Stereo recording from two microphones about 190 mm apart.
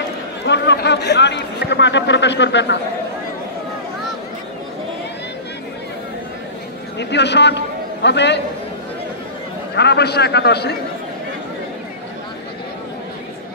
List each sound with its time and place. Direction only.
0.5 s a man's voice: 65° left (ahead or behind)
7.0 s a man's voice: 65° left (ahead or behind)
9.8 s a man's voice: 60° left (ahead or behind)